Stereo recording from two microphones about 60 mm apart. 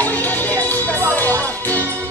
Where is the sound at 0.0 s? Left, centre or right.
Left.